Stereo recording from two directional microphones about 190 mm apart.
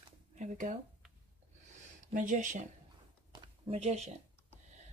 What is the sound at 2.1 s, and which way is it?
Speech, 40° right (ahead or behind).